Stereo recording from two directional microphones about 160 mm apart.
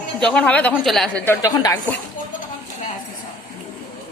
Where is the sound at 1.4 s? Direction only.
25° left (ahead or behind).